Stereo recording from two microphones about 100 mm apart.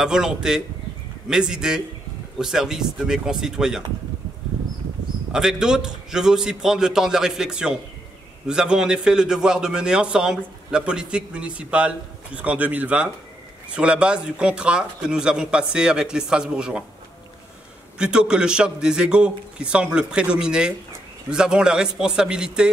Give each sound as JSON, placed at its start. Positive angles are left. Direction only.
{"t": 0.0, "sound": "a man's voice", "side_deg": -5}
{"t": 5.3, "sound": "a man's voice", "side_deg": -5}
{"t": 17.9, "sound": "a man's voice", "side_deg": -5}